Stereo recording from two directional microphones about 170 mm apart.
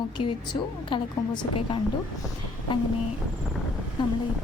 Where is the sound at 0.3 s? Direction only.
30° left (ahead or behind).